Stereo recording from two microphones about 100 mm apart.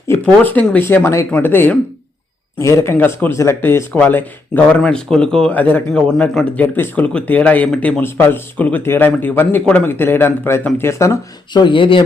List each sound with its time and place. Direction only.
0.5 s speech: 15° left (ahead or behind)
2.6 s speech: 30° left (ahead or behind)
11.5 s speech: 50° left (ahead or behind)